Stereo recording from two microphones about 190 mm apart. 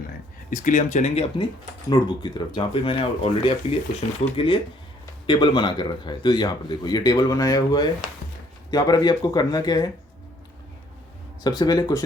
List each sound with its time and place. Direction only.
0.5 s a man's voice: 40° left (ahead or behind); by 9.9 s 20° left (ahead or behind)
11.4 s a man's voice: 20° left (ahead or behind)